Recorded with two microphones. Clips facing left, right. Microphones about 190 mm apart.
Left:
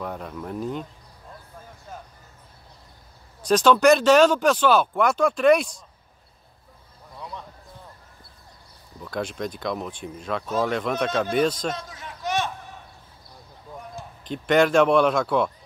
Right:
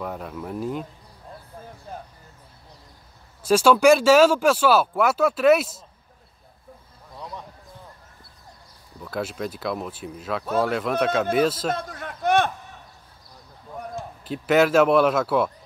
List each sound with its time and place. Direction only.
0.0 s speech: 5° right (ahead or behind)
3.4 s speech: 5° right (ahead or behind)
9.0 s speech: 5° right (ahead or behind)
11.7 s a sound: 55° right (ahead or behind)
13.9 s speech: 5° right (ahead or behind)